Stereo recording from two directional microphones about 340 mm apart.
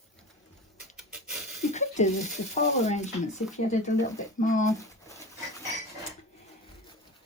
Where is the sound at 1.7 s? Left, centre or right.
Left.